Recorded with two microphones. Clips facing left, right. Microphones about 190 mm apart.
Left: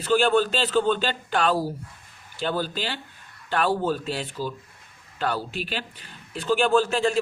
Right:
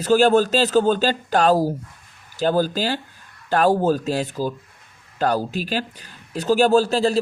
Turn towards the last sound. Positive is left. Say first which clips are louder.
# right 4 dB
turn(degrees=-35)  # may be behind; listen again after turning